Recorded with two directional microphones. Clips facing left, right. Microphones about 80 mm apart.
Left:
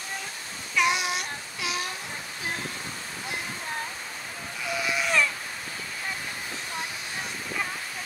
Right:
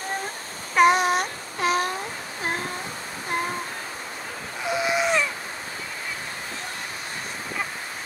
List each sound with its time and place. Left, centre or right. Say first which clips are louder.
0.7 s babbling: right 8 dB; right
4.6 s baby cry: right 5 dB; right